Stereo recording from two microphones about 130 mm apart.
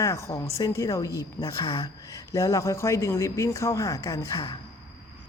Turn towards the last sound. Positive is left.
turn(degrees=25)  # may be behind; listen again after turning